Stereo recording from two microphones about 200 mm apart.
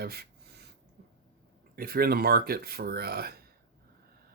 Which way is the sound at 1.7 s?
50° right (ahead or behind).